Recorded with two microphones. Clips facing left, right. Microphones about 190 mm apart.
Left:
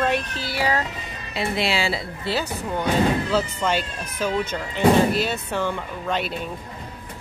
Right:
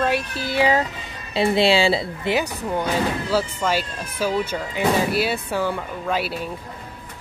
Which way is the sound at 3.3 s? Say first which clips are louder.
Right 1 dB; 5° right (ahead or behind).